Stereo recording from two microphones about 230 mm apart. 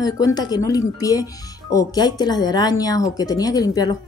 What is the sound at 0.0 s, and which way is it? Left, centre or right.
Speech, centre.